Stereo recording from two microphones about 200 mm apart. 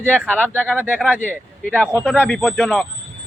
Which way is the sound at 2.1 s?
5° left (ahead or behind).